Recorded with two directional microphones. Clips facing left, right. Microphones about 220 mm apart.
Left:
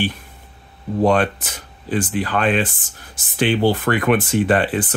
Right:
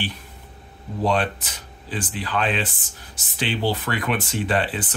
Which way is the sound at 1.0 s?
50° left (ahead or behind).